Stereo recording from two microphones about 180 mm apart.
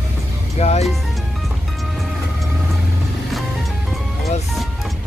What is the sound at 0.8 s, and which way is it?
Music, centre (ahead or behind).